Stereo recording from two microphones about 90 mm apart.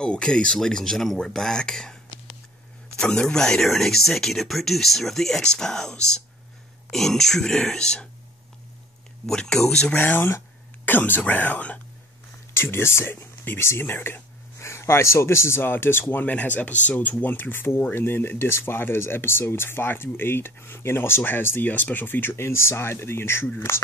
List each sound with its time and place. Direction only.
0.0 s speech: 10° left (ahead or behind)
3.0 s speech: 10° left (ahead or behind)
9.2 s speech: 5° left (ahead or behind); by 23.5 s 25° left (ahead or behind)